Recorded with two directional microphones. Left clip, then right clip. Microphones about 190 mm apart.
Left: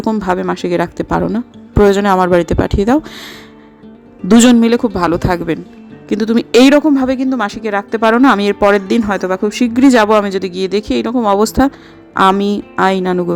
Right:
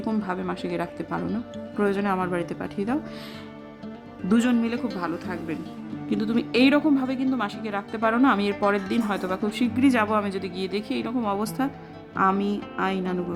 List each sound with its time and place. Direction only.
0.0 s speech: 35° left (ahead or behind)
4.3 s speech: 50° left (ahead or behind)
6.1 s speech: 35° left (ahead or behind)